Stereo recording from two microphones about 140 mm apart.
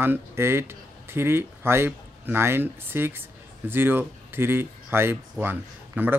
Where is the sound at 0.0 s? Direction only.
15° right (ahead or behind).